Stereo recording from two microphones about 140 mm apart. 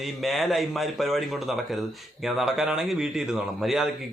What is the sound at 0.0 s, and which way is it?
Speech, centre (ahead or behind).